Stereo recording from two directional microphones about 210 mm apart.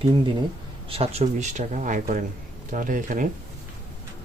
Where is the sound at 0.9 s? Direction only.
30° right (ahead or behind).